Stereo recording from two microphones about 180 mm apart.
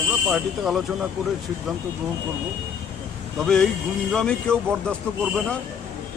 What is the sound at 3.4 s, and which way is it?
Speech, 5° left (ahead or behind).